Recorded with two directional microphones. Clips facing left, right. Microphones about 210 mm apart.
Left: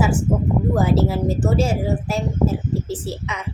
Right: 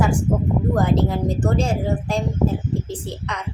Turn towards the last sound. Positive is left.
turn(degrees=5)  # may be behind; listen again after turning